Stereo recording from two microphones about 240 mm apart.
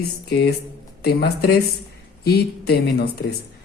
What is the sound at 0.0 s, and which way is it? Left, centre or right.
Speech, left.